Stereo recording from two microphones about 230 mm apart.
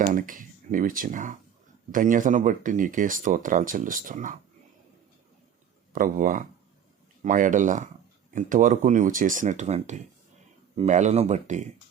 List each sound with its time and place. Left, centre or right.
0.0 s speech: right
5.9 s speech: right